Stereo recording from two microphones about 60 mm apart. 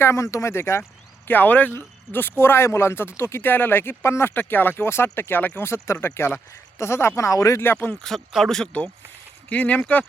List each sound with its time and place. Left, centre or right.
0.0 s speech: left
1.3 s speech: left
3.4 s speech: left
4.4 s speech: left
5.6 s speech: left
6.0 s speech: left
7.2 s speech: left
7.6 s speech: left
8.1 s speech: centre
9.5 s speech: left